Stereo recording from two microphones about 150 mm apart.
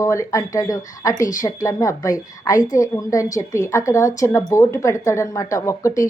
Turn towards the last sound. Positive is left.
turn(degrees=20)  # may be behind; listen again after turning